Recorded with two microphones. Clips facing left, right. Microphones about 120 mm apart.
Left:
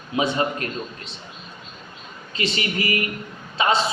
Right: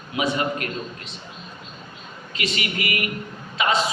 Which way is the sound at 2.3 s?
30° left (ahead or behind).